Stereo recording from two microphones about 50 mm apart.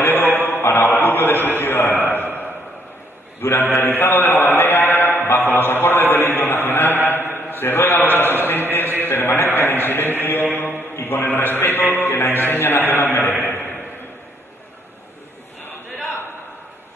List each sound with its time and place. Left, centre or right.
0.0 s mantra: left
0.9 s a sound: left
3.3 s a man's voice: left
4.0 s mantra: left
7.1 s a sound: left
9.0 s mantra: left
9.5 s a sound: left
10.2 s mantra: left
11.2 s mantra: left
11.9 s music: left